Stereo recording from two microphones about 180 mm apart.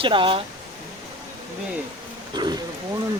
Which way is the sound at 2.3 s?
25° right (ahead or behind).